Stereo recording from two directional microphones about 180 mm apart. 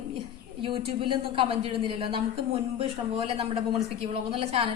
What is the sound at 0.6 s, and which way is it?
A woman's voice, 30° right (ahead or behind).